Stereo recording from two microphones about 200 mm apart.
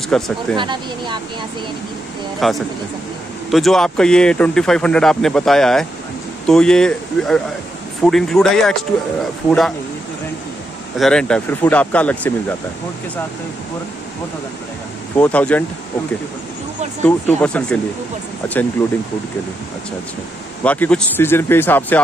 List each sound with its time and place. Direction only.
0.1 s speech: 5° left (ahead or behind)
0.6 s speech: 25° right (ahead or behind)
2.4 s speech: centre (ahead or behind)
11.0 s speech: 5° left (ahead or behind)
15.1 s speech: 5° left (ahead or behind)
17.0 s speech: 5° left (ahead or behind)
20.6 s speech: 5° left (ahead or behind)